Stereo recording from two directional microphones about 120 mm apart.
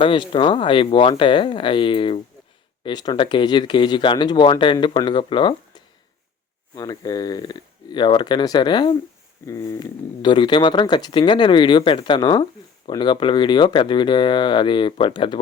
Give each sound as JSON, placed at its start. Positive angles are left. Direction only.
{"t": 0.0, "sound": "speech", "side_deg": 45}
{"t": 6.7, "sound": "speech", "side_deg": 30}
{"t": 9.5, "sound": "a sound", "side_deg": 25}
{"t": 9.8, "sound": "speech", "side_deg": 40}